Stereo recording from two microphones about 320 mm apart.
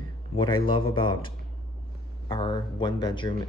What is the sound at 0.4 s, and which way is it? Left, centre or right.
Speech, centre.